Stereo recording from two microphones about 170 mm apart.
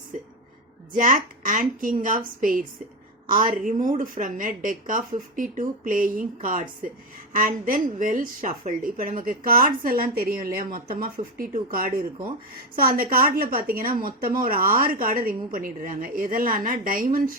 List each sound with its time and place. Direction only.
0.9 s a woman's voice: 50° right (ahead or behind)